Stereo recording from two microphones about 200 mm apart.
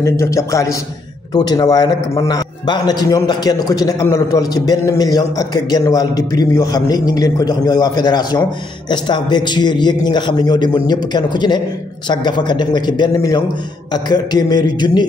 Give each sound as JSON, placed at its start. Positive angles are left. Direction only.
{"t": 0.0, "sound": "a man's voice", "side_deg": 15}